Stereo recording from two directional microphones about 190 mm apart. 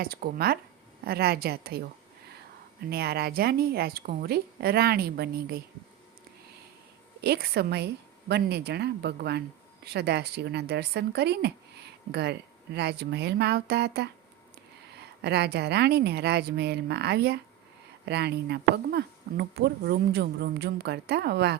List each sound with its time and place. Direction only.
0.0 s speech: 50° right (ahead or behind)
2.9 s speech: 55° right (ahead or behind)
7.2 s speech: 55° right (ahead or behind)